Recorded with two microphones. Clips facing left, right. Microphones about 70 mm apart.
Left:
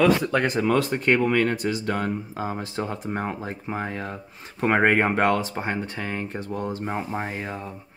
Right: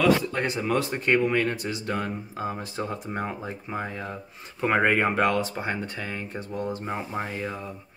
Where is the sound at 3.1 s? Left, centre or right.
Left.